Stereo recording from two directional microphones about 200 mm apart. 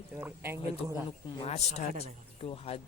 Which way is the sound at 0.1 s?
10° right (ahead or behind).